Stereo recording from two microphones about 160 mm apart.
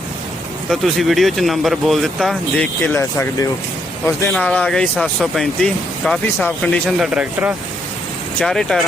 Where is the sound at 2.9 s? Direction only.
15° left (ahead or behind).